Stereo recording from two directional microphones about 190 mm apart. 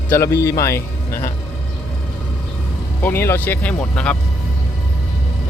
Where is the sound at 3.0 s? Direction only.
10° left (ahead or behind).